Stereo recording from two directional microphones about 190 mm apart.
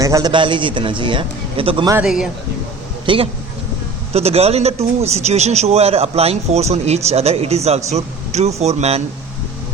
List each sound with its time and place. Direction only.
0.0 s a man's voice: 20° right (ahead or behind)
2.0 s a man's voice: 5° right (ahead or behind)
3.1 s a man's voice: 25° right (ahead or behind)